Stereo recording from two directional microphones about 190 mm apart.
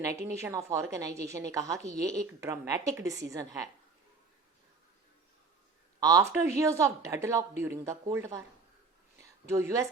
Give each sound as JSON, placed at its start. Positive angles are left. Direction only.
{"t": 0.0, "sound": "a woman's voice", "side_deg": -15}
{"t": 6.0, "sound": "a woman's voice", "side_deg": -20}
{"t": 9.5, "sound": "a woman's voice", "side_deg": -15}